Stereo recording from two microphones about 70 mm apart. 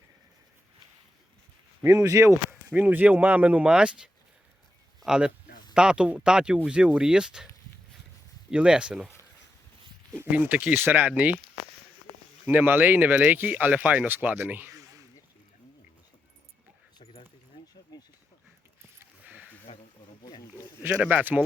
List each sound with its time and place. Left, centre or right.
1.8 s speech: right
2.7 s speech: right
8.4 s speech: centre
10.2 s speech: right
12.5 s speech: right
14.7 s a sound: right
19.2 s a sound: right
21.1 s speech: right